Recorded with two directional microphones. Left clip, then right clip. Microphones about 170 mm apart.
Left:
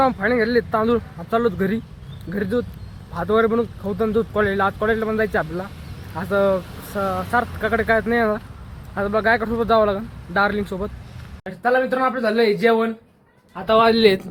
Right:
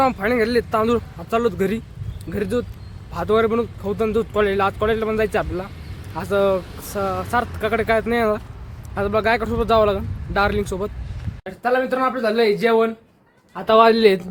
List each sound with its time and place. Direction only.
0.0 s speech: 10° right (ahead or behind)
13.5 s a man's voice: 45° right (ahead or behind)
13.9 s speech: centre (ahead or behind)